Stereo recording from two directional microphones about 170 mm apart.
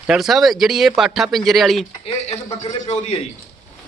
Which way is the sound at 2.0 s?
35° left (ahead or behind).